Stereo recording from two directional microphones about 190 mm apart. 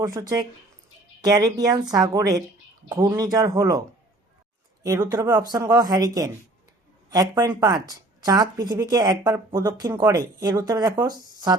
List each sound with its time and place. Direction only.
0.0 s a woman's voice: 20° right (ahead or behind)